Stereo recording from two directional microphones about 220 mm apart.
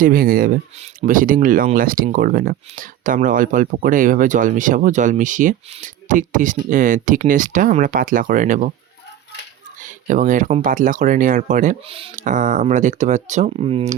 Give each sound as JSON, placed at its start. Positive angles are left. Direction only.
{"t": 0.0, "sound": "speech", "side_deg": -40}
{"t": 9.8, "sound": "speech", "side_deg": -35}